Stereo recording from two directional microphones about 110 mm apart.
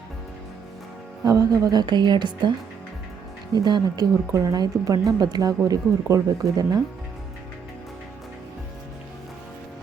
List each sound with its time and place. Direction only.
1.2 s a woman's voice: 35° right (ahead or behind)
3.5 s a woman's voice: 35° right (ahead or behind)